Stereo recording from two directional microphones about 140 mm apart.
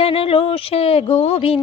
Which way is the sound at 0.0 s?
40° left (ahead or behind).